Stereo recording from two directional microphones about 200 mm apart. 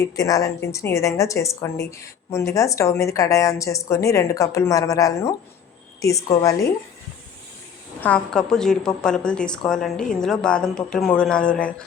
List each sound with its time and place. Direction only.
0.0 s speech: 15° left (ahead or behind)
8.0 s a woman's voice: 5° left (ahead or behind)